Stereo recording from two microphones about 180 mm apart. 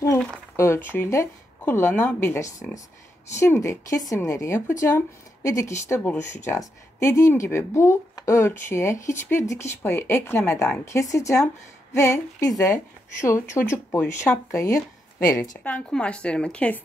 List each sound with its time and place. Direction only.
0.0 s a sound: 15° left (ahead or behind)
0.6 s speech: 15° left (ahead or behind)
15.6 s speech: 5° left (ahead or behind)